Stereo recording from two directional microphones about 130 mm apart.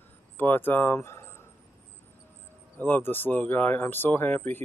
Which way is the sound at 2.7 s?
15° left (ahead or behind).